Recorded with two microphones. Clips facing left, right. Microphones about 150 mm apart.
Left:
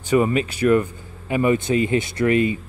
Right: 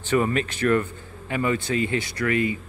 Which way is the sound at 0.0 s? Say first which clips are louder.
Left 4 dB; 10° left (ahead or behind).